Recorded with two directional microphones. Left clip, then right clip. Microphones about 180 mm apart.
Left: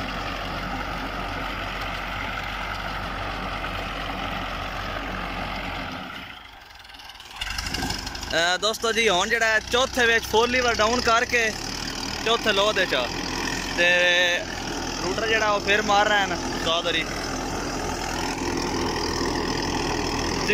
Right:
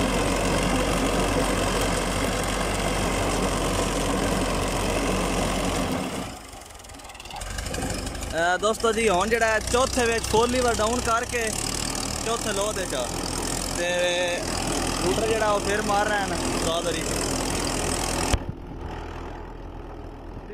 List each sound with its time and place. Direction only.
8.4 s speech: 5° right (ahead or behind)
11.1 s speech: 5° right (ahead or behind)